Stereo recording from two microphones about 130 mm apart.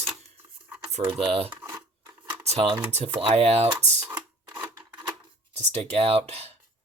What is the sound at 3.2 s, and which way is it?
Speech, 50° right (ahead or behind).